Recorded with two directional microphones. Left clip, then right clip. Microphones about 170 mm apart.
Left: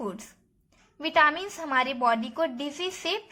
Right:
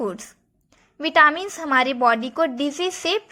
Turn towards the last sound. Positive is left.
turn(degrees=-30)  # may be behind; listen again after turning